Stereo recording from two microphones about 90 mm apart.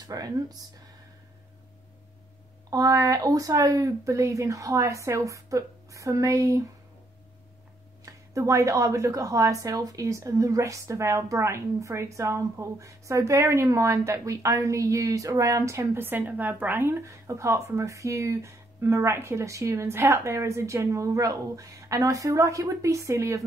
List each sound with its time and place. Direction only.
0.0 s speech: 45° right (ahead or behind)
2.7 s speech: 40° right (ahead or behind)
8.0 s speech: 35° right (ahead or behind)